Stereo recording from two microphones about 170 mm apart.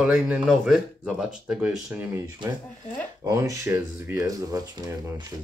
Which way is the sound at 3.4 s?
15° right (ahead or behind).